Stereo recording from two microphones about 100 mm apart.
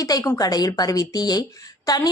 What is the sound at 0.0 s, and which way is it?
A woman's voice, 35° left (ahead or behind).